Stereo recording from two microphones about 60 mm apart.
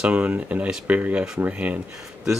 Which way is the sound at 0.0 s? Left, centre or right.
Centre.